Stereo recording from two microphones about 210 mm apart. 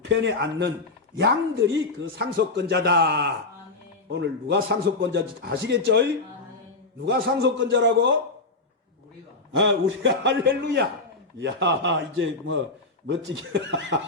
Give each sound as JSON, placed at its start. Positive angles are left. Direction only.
{"t": 0.0, "sound": "speech", "side_deg": -60}
{"t": 9.6, "sound": "speech", "side_deg": -60}